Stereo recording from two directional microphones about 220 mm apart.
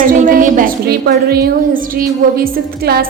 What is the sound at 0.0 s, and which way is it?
A woman's voice, 35° right (ahead or behind).